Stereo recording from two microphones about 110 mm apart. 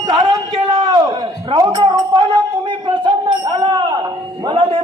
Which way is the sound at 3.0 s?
45° right (ahead or behind).